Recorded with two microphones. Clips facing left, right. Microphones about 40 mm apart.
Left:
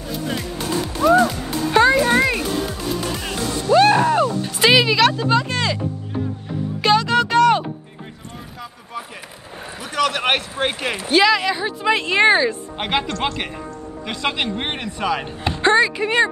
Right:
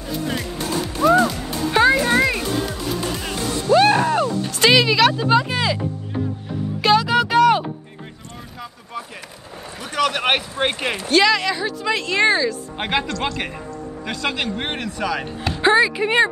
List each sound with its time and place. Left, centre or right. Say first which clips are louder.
1.7 s music: left 1 dB; centre
3.7 s a sound: left 1 dB; centre
6.8 s music: even; centre
9.8 s boat: even; centre
10.6 s speech: right 1 dB; centre
11.1 s speech: left 1 dB; centre; by 12.5 s left
12.7 s speech: even; centre
13.1 s speech: left 1 dB; left
14.0 s speech: left 1 dB; left
15.6 s speech: even; centre